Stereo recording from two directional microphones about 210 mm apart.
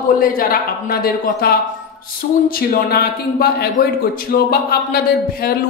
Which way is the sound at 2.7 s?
45° left (ahead or behind).